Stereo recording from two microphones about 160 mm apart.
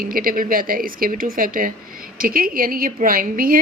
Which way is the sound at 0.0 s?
65° right (ahead or behind).